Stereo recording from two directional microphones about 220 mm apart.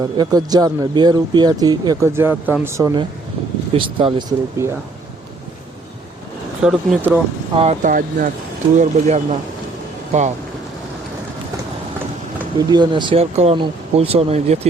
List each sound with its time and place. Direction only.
0.0 s speech: 15° right (ahead or behind)
6.7 s speech: 5° right (ahead or behind)
7.5 s speech: 30° right (ahead or behind)
12.5 s speech: 20° right (ahead or behind)